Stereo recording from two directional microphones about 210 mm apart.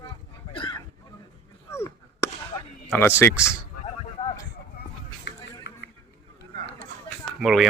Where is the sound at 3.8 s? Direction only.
25° left (ahead or behind).